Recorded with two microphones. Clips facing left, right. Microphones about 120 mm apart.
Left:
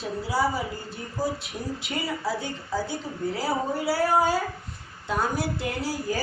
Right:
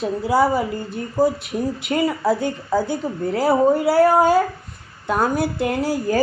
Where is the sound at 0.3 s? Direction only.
55° right (ahead or behind).